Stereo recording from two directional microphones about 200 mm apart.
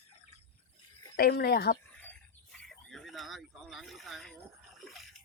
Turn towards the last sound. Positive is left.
turn(degrees=0)  # may be behind; listen again after turning